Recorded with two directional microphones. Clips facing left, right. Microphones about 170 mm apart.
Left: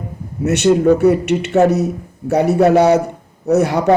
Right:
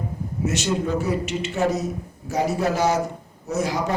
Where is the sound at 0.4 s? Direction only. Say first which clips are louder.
Left 12 dB; 65° left (ahead or behind).